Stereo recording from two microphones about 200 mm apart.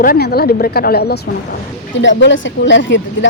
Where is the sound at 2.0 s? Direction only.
65° left (ahead or behind).